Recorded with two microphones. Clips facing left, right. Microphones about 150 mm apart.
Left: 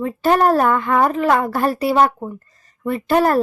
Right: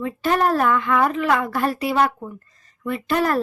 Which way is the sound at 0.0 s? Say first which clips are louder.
Left 4 dB; 40° left (ahead or behind).